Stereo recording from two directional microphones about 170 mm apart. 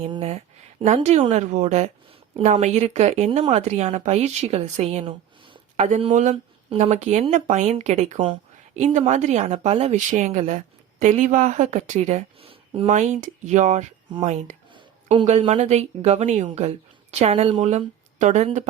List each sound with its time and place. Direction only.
0.0 s speech: 35° right (ahead or behind)